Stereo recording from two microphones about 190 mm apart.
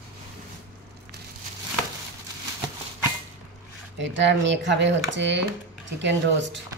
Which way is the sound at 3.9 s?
70° right (ahead or behind).